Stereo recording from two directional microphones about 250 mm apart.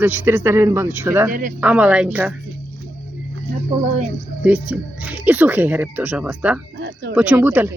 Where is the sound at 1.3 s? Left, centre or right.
Right.